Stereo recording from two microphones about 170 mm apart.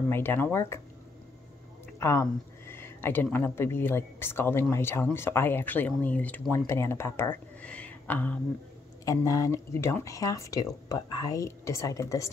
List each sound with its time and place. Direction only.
0.1 s speech: 15° left (ahead or behind)
2.0 s speech: 15° left (ahead or behind)